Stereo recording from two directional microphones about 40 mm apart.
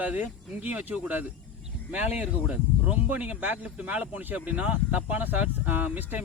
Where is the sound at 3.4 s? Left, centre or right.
Right.